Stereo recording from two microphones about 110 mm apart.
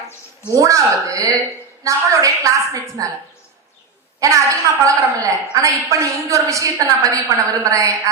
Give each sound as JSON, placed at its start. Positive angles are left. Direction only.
{"t": 0.5, "sound": "a woman's voice", "side_deg": -30}
{"t": 4.2, "sound": "a woman's voice", "side_deg": -30}